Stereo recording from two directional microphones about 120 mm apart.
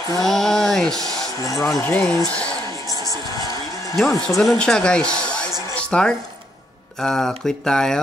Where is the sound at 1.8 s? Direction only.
15° left (ahead or behind).